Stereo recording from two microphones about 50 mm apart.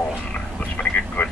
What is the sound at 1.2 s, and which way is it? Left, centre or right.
Speech, left.